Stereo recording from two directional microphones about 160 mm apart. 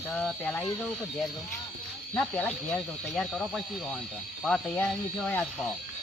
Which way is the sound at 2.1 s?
10° left (ahead or behind).